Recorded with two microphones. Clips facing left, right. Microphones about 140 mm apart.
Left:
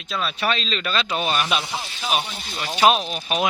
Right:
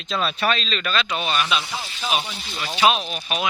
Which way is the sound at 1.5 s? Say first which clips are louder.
Even; 50° left (ahead or behind).